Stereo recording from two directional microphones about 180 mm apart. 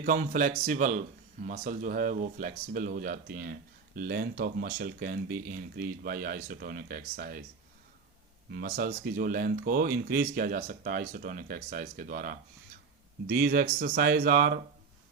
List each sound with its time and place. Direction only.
0.0 s speech: 50° right (ahead or behind)
8.4 s speech: 60° right (ahead or behind)